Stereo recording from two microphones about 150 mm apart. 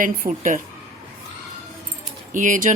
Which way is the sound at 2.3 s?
60° right (ahead or behind).